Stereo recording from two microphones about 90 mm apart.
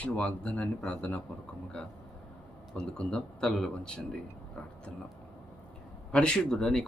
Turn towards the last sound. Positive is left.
turn(degrees=5)  # may be behind; listen again after turning